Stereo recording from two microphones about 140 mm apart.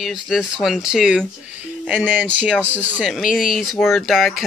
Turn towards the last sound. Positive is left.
turn(degrees=0)  # may be behind; listen again after turning